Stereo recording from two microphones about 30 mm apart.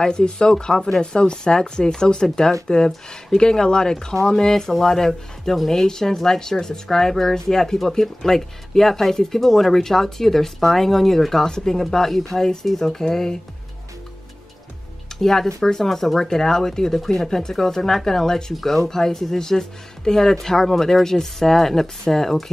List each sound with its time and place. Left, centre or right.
0.0 s speech: left
4.1 s a woman's voice: centre
12.9 s a woman's voice: centre
15.1 s a woman's voice: centre